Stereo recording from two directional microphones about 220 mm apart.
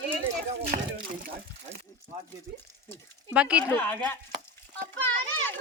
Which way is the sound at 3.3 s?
5° right (ahead or behind).